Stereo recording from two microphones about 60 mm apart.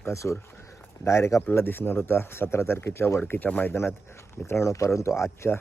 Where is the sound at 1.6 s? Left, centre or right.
Left.